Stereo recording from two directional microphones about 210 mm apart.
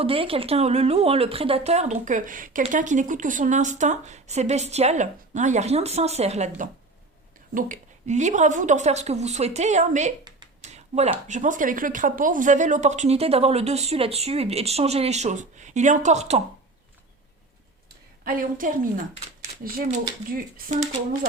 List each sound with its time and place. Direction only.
0.0 s speech: 25° right (ahead or behind)
7.5 s speech: 35° right (ahead or behind)
10.6 s a sound: 30° right (ahead or behind)
11.3 s speech: 35° right (ahead or behind)
18.3 s speech: 40° right (ahead or behind)
19.4 s a sound: 40° right (ahead or behind)
20.3 s speech: 35° right (ahead or behind)